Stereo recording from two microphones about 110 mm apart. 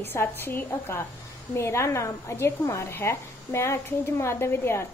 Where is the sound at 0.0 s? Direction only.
20° left (ahead or behind).